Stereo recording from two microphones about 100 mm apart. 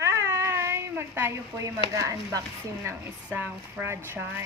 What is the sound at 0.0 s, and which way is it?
Cat, 25° right (ahead or behind).